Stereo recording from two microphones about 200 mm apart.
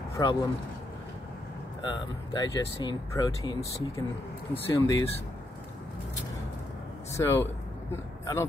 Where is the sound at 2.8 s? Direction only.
20° left (ahead or behind).